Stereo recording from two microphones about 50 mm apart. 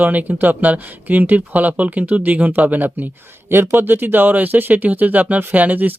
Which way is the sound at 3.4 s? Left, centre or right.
Right.